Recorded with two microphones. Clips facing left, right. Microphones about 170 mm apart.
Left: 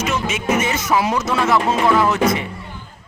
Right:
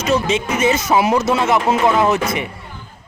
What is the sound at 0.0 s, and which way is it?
Speech, 30° right (ahead or behind).